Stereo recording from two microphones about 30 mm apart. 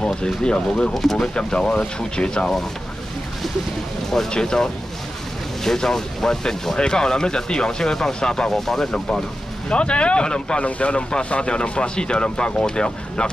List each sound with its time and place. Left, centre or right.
0.0 s speech: left
4.3 s speech: left
8.5 s speech: centre
9.7 s speech: left
10.6 s speech: left
11.2 s speech: left